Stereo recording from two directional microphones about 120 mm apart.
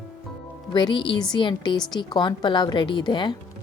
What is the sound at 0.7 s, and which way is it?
A woman's voice, 40° left (ahead or behind).